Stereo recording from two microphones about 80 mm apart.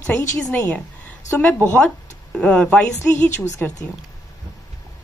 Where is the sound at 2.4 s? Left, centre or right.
Centre.